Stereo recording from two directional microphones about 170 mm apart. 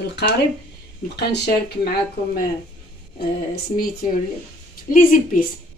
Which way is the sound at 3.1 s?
65° left (ahead or behind).